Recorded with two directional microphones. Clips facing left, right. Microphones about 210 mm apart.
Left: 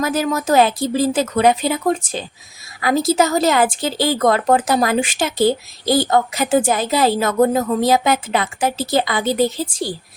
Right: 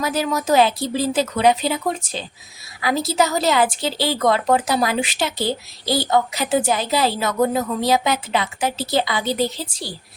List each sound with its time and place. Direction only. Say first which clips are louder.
0.0 s speech: left 3 dB; 50° left (ahead or behind)